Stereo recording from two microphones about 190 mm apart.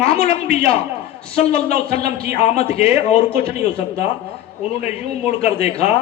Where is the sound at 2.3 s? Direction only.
35° left (ahead or behind).